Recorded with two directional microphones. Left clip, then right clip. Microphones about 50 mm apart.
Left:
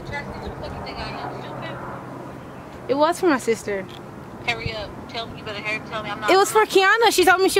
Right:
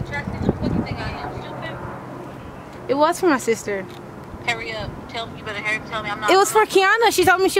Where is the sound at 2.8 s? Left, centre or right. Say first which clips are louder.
Right 1 dB; centre.